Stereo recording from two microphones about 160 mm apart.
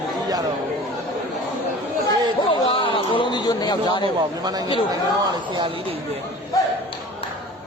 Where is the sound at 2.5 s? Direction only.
30° left (ahead or behind).